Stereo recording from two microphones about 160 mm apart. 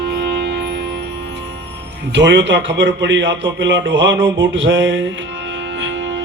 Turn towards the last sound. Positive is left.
turn(degrees=-90)